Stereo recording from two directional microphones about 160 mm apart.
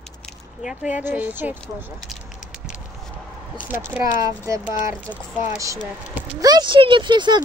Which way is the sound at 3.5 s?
15° right (ahead or behind).